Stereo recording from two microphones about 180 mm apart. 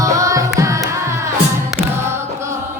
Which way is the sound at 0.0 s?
15° right (ahead or behind).